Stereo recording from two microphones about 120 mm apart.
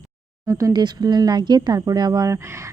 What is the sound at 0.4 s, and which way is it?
Speech, 25° right (ahead or behind).